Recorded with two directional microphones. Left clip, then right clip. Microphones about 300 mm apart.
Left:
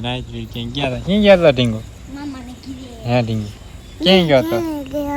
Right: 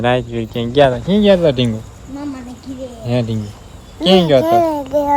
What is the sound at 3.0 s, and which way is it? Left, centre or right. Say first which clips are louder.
Speech: left 1 dB; centre.